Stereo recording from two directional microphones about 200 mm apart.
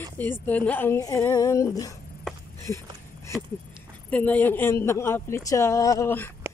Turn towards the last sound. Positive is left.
turn(degrees=10)  # may be behind; listen again after turning